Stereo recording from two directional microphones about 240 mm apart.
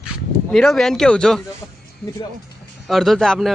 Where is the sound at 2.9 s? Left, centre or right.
Centre.